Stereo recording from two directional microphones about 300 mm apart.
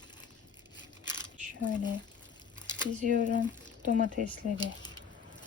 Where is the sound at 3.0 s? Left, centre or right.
Right.